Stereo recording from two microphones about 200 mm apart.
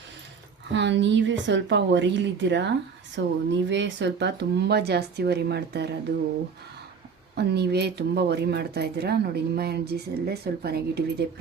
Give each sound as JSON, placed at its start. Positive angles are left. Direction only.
{"t": 0.7, "sound": "speech", "side_deg": -65}
{"t": 7.3, "sound": "speech", "side_deg": -55}